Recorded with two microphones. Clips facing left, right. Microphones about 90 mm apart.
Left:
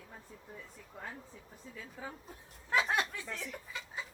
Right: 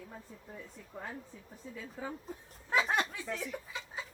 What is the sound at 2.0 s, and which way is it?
Speech, 5° left (ahead or behind).